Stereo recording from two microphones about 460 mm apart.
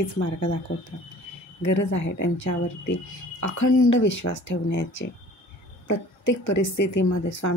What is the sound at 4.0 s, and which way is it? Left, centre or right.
Speech, left.